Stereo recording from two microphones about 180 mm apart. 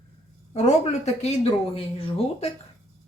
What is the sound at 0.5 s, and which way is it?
Speech, 40° left (ahead or behind).